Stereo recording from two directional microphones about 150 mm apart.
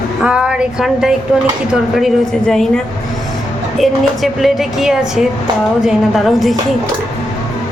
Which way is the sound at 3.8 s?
Centre (ahead or behind).